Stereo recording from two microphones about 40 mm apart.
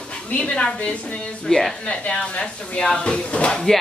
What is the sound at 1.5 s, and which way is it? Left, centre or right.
Speech, centre.